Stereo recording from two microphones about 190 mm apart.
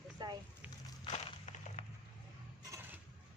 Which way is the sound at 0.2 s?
20° right (ahead or behind).